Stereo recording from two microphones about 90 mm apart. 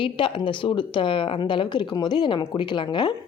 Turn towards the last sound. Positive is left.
turn(degrees=55)  # may be behind; listen again after turning